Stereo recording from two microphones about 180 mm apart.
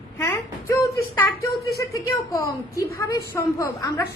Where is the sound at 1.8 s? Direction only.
15° left (ahead or behind).